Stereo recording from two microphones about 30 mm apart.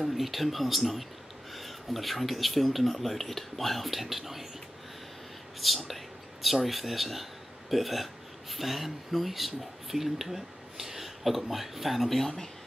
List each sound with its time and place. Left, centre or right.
0.0 s speech: centre
5.6 s speech: centre